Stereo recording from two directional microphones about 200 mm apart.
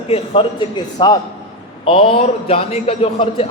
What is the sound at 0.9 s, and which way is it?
A man's voice, 20° left (ahead or behind).